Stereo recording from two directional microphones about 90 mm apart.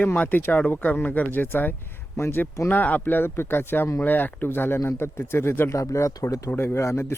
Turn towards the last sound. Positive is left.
turn(degrees=30)  # may be behind; listen again after turning